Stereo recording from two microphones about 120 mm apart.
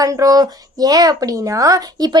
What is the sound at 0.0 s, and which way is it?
Speech, 30° right (ahead or behind).